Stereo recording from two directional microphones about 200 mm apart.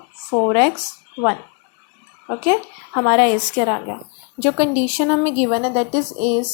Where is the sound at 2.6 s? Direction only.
5° left (ahead or behind).